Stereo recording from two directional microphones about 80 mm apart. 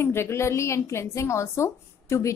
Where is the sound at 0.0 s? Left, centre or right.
Left.